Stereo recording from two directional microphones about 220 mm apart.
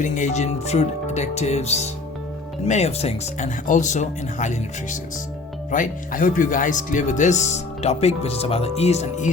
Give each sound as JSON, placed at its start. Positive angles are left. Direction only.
{"t": 0.0, "sound": "speech", "side_deg": 35}